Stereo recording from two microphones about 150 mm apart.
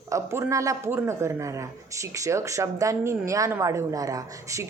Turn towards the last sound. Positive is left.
turn(degrees=-20)  # may be behind; listen again after turning